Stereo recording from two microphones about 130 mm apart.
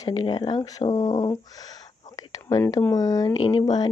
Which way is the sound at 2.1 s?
30° left (ahead or behind).